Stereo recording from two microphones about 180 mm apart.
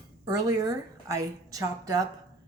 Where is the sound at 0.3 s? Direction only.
20° right (ahead or behind).